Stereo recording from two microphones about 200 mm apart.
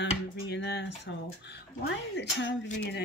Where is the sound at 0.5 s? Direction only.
55° left (ahead or behind).